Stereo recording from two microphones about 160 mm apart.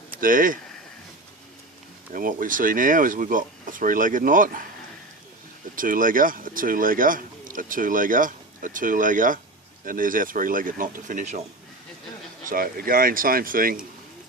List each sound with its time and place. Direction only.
0.2 s speech: 60° right (ahead or behind)
2.1 s speech: 60° right (ahead or behind)
5.7 s speech: 60° right (ahead or behind)
12.5 s speech: 65° right (ahead or behind)